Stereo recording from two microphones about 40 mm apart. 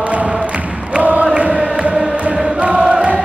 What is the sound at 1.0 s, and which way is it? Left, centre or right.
Chant, right.